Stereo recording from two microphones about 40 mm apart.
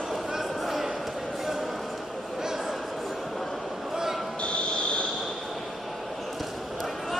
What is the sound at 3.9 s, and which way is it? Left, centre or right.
Basketball bounce, centre.